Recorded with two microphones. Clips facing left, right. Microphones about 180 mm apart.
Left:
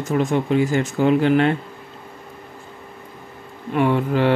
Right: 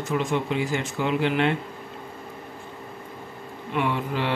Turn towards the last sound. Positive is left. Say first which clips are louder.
# left 8 dB
turn(degrees=50)  # may be behind; listen again after turning